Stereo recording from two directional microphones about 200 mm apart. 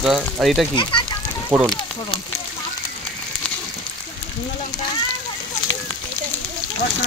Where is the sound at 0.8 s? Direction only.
25° left (ahead or behind).